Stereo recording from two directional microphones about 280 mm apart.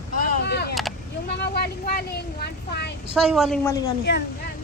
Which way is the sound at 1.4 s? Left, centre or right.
Left.